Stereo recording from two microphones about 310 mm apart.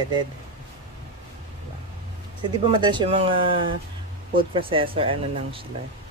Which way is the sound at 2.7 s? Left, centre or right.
Centre.